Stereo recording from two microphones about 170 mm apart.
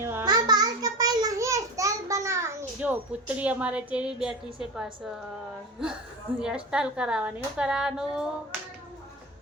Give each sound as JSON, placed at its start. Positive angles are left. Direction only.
{"t": 0.0, "sound": "a sound", "side_deg": -15}
{"t": 0.3, "sound": "child singing", "side_deg": -25}
{"t": 6.4, "sound": "a woman's voice", "side_deg": -5}